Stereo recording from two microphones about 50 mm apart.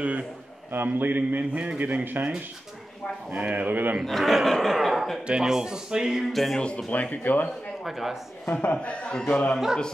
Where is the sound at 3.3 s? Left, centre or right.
Right.